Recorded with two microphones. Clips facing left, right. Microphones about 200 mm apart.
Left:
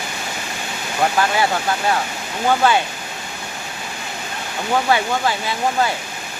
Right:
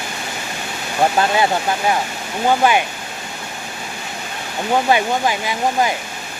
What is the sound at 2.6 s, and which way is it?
Speech, 15° right (ahead or behind).